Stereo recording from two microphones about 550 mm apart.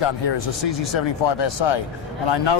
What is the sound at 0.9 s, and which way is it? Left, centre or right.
Speech, left.